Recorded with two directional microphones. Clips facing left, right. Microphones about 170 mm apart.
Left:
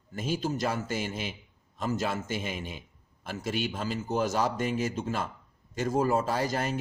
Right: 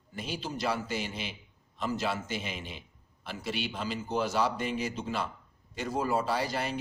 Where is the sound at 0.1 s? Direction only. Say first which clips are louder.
Left 6 dB; 45° left (ahead or behind).